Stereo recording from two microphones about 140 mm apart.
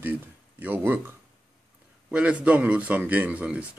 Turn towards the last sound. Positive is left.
turn(degrees=-10)  # may be behind; listen again after turning